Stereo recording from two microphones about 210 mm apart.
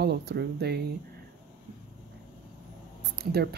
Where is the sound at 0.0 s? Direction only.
50° right (ahead or behind).